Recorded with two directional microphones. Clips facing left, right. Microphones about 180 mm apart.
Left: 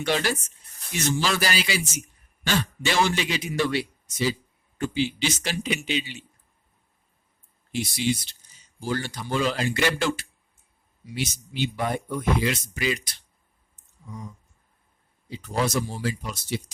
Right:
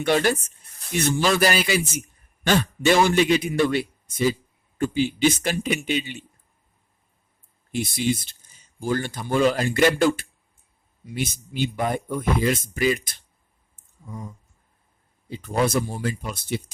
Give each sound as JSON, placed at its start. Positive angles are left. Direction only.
{"t": 0.0, "sound": "speech", "side_deg": -50}
{"t": 7.7, "sound": "speech", "side_deg": -55}
{"t": 14.1, "sound": "speech", "side_deg": -50}